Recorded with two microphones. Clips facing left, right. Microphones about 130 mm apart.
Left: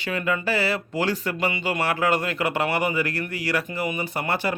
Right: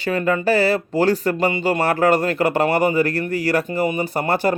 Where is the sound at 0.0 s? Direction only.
35° right (ahead or behind).